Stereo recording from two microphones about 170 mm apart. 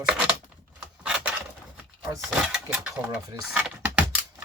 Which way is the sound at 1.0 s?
5° right (ahead or behind).